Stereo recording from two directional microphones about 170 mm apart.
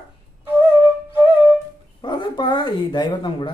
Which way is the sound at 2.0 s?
25° left (ahead or behind).